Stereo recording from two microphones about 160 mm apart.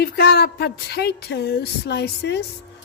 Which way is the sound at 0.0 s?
90° left.